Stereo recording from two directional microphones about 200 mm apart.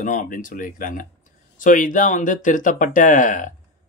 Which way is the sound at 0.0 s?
40° left (ahead or behind).